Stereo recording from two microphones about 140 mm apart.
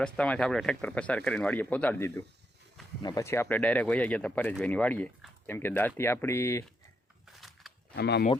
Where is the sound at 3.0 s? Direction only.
25° left (ahead or behind).